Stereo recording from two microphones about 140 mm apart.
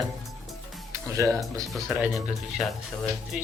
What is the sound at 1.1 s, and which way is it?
Speech, 20° right (ahead or behind).